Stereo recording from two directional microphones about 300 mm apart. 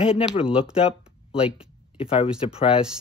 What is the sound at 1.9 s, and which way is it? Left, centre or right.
Speech, centre.